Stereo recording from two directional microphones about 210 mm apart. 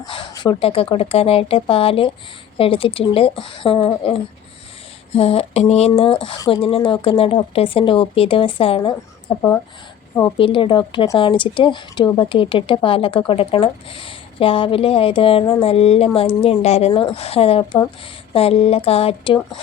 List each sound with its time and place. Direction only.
0.1 s speech: 20° left (ahead or behind)